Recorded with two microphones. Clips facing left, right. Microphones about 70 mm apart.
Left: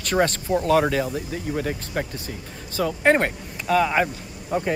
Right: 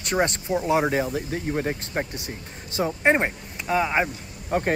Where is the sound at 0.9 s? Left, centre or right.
Right.